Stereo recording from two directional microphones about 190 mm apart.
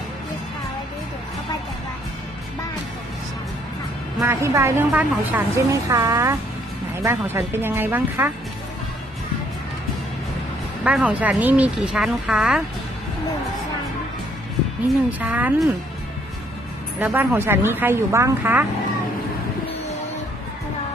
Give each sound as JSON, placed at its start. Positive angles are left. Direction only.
{"t": 4.3, "sound": "a woman's voice", "side_deg": -15}
{"t": 10.8, "sound": "speech", "side_deg": -5}
{"t": 15.0, "sound": "a woman's voice", "side_deg": -10}
{"t": 17.0, "sound": "a woman's voice", "side_deg": -10}